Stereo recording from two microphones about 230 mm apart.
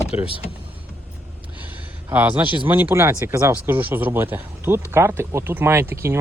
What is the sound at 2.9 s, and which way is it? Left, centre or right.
Speech, centre.